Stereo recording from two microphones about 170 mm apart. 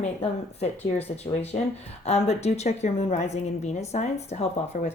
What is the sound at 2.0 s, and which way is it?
Speech, 40° left (ahead or behind).